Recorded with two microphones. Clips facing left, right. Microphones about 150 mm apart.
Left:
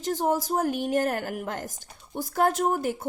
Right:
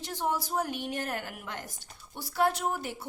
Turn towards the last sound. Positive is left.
turn(degrees=45)  # may be behind; listen again after turning